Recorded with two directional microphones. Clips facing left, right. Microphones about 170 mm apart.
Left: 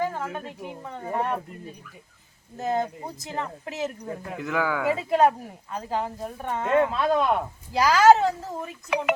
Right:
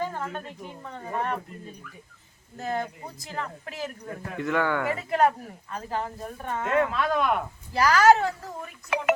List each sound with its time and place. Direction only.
0.1 s speech: 10° left (ahead or behind)
2.6 s speech: 20° left (ahead or behind)
4.4 s speech: centre (ahead or behind)
4.9 s speech: 15° left (ahead or behind)
7.7 s speech: 15° left (ahead or behind)
8.9 s speech: centre (ahead or behind)